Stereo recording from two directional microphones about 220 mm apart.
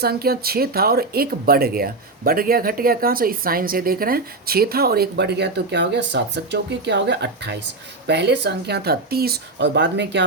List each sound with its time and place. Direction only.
0.0 s speech: 45° right (ahead or behind)